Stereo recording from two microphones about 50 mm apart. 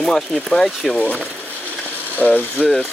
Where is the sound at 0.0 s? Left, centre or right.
Centre.